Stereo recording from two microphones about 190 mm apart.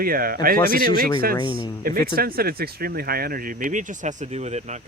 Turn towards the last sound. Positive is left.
turn(degrees=-35)  # may be behind; listen again after turning